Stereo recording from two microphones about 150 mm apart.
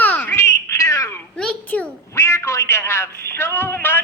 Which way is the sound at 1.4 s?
10° left (ahead or behind).